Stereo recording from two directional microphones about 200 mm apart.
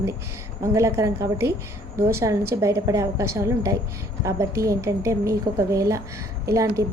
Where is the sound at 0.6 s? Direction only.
15° right (ahead or behind).